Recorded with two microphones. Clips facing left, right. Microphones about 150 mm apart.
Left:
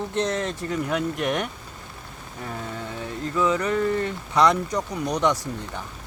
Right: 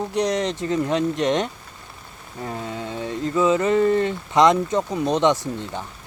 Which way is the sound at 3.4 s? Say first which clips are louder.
Right 5 dB; 20° right (ahead or behind).